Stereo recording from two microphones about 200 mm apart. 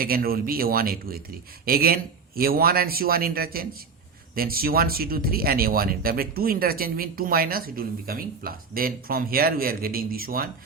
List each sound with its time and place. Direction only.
0.0 s speech: 45° right (ahead or behind)